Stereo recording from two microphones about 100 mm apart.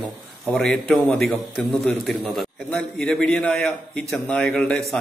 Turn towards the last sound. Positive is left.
turn(degrees=5)  # may be behind; listen again after turning